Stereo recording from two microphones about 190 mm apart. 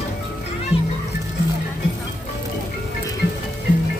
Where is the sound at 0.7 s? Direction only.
30° left (ahead or behind).